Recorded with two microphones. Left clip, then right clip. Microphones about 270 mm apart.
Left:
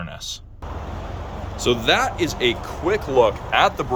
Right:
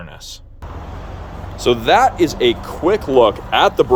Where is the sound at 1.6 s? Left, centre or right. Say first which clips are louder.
Right 6 dB; centre; by 3.8 s right.